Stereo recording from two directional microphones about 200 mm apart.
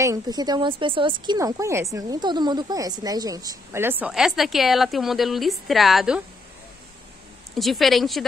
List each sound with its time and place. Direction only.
0.0 s speech: 15° right (ahead or behind); by 6.2 s centre (ahead or behind)
7.5 s speech: centre (ahead or behind)